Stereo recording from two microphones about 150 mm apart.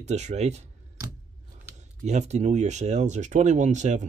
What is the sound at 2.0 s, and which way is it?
Speech, 50° right (ahead or behind).